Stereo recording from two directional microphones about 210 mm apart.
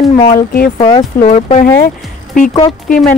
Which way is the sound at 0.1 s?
30° left (ahead or behind).